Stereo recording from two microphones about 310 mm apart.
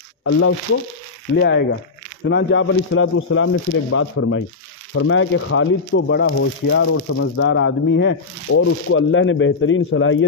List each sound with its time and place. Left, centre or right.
0.2 s speech: left